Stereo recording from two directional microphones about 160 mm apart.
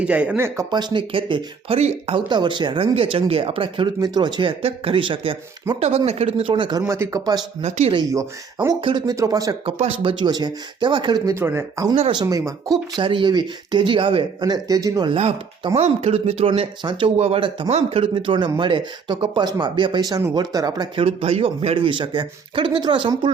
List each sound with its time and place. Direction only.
0.0 s speech: 10° right (ahead or behind)
0.7 s speech: 25° right (ahead or behind)
7.6 s speech: 35° right (ahead or behind)
8.1 s speech: 20° right (ahead or behind)
8.8 s speech: 30° right (ahead or behind)
9.8 s speech: 35° right (ahead or behind)
11.3 s speech: 15° right (ahead or behind)
15.2 s speech: 40° right (ahead or behind)